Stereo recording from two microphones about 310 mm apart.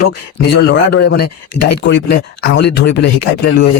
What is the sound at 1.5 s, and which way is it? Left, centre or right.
Speech, left.